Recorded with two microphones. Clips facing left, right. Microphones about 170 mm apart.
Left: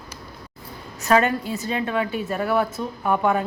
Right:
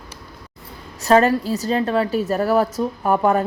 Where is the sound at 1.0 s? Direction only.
35° right (ahead or behind).